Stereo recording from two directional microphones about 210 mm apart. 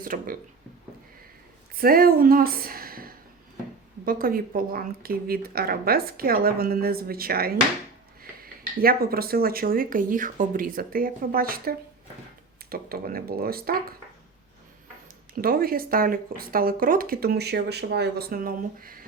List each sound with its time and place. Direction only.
0.0 s speech: 40° right (ahead or behind)
1.8 s speech: 45° right (ahead or behind)
15.4 s speech: 45° right (ahead or behind)